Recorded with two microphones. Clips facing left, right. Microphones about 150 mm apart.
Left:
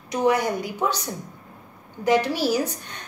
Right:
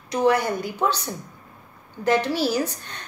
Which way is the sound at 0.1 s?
15° left (ahead or behind).